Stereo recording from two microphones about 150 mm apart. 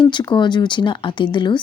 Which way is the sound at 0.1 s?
30° left (ahead or behind).